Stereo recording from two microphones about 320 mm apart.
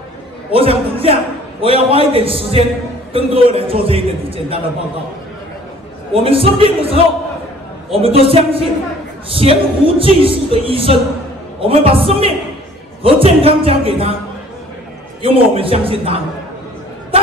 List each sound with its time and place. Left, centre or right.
0.5 s a man's voice: centre
6.1 s a man's voice: centre
15.2 s a man's voice: centre